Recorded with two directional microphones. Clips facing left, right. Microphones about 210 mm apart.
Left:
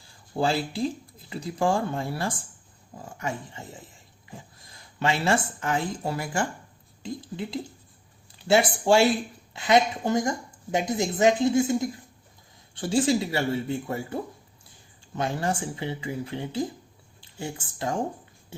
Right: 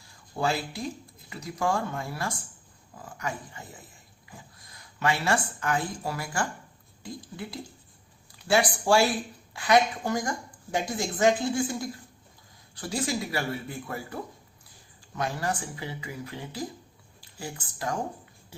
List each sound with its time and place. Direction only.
0.3 s a woman's voice: 30° left (ahead or behind)